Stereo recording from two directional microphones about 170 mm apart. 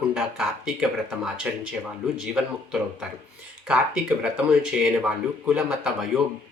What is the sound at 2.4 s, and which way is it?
Speech, 5° right (ahead or behind).